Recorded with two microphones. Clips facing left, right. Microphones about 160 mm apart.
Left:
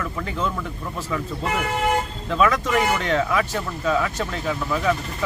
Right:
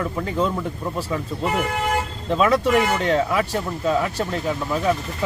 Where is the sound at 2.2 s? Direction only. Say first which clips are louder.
Right 3 dB; 30° right (ahead or behind).